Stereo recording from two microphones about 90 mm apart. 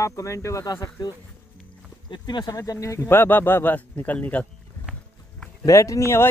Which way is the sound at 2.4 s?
40° left (ahead or behind).